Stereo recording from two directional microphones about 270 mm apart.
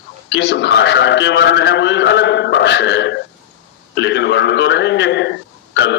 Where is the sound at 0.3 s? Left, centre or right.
Left.